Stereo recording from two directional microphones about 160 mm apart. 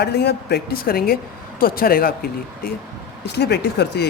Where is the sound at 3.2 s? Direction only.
90° left.